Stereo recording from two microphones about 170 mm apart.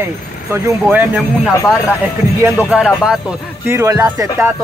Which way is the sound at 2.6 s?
5° right (ahead or behind).